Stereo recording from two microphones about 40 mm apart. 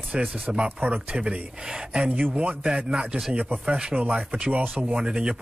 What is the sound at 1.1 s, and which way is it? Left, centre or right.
Speech, right.